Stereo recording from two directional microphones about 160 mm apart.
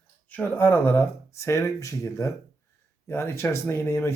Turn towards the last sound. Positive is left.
turn(degrees=15)  # may be behind; listen again after turning